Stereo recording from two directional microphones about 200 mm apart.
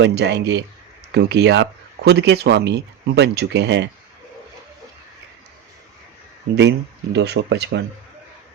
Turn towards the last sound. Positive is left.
turn(degrees=-60)  # may be behind; listen again after turning